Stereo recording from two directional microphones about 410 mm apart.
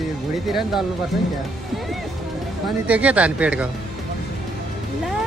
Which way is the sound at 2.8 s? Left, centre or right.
Centre.